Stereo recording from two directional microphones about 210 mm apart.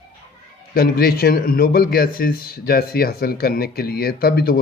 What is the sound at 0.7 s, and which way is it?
A man's voice, 45° left (ahead or behind).